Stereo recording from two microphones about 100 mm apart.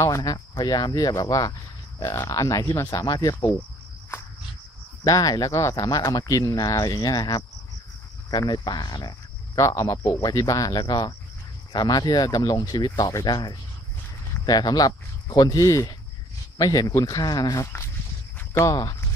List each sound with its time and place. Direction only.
0.0 s speech: 35° left (ahead or behind)
5.0 s speech: 40° left (ahead or behind)
9.6 s speech: 35° left (ahead or behind)
18.7 s speech: 40° left (ahead or behind)